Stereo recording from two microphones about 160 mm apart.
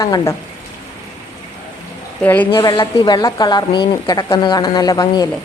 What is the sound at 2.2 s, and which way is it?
A woman's voice, 10° left (ahead or behind).